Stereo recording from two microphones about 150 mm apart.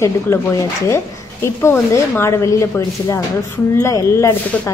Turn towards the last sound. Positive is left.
turn(degrees=20)  # may be behind; listen again after turning